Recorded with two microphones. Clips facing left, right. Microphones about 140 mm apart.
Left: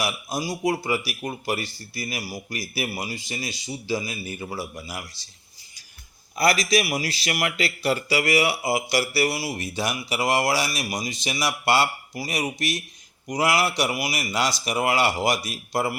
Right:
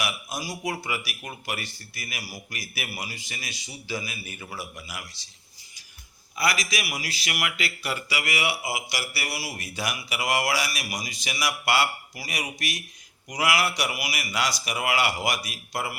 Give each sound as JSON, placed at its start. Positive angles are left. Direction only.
{"t": 0.0, "sound": "a man's voice", "side_deg": 30}
{"t": 6.3, "sound": "a man's voice", "side_deg": 35}
{"t": 9.1, "sound": "speech", "side_deg": 25}